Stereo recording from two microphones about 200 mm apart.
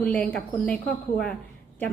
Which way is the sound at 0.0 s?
5° left (ahead or behind).